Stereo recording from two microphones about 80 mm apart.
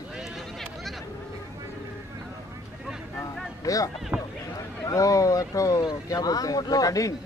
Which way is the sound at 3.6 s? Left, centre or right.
Left.